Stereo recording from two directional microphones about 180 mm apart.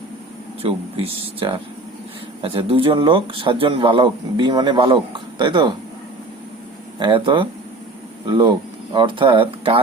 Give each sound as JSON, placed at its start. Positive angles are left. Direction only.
{"t": 0.6, "sound": "speech", "side_deg": -35}
{"t": 7.0, "sound": "speech", "side_deg": -25}